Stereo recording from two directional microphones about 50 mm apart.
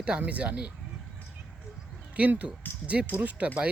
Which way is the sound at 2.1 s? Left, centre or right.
Right.